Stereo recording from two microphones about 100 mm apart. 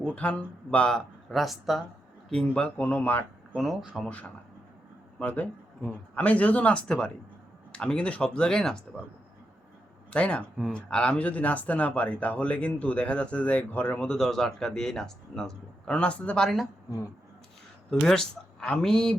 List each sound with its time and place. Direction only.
0.0 s speech: 15° left (ahead or behind)
3.6 s speech: centre (ahead or behind)
5.2 s speech: 15° left (ahead or behind)
10.1 s speech: 10° left (ahead or behind)
14.1 s speech: 5° left (ahead or behind)
18.0 s speech: 5° left (ahead or behind)